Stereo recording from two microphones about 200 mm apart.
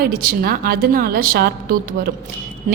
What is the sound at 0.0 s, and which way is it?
A woman's voice, 50° right (ahead or behind).